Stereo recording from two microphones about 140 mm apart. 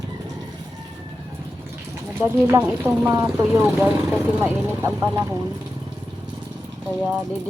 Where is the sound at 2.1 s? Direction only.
15° right (ahead or behind).